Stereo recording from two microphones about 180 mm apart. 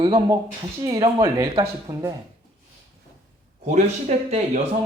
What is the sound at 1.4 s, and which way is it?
Speech, 30° right (ahead or behind).